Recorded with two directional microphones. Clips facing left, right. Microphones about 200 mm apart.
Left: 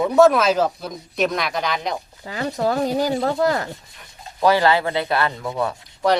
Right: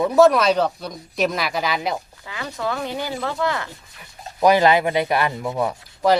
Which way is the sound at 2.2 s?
40° left (ahead or behind).